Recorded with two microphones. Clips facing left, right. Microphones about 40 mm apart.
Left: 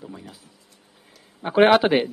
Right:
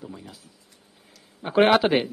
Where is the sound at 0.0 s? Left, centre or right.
Centre.